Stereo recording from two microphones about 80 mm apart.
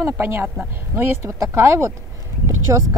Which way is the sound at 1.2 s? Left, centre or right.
Right.